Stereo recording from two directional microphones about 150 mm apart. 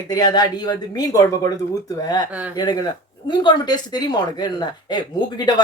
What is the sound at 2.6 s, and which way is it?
Speech, 25° left (ahead or behind).